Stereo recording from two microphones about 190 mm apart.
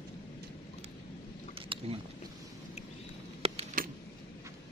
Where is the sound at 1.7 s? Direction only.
25° right (ahead or behind).